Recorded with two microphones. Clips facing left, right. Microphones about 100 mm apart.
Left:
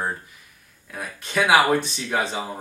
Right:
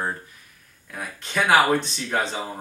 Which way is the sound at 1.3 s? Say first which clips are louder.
Left 1 dB; 5° left (ahead or behind).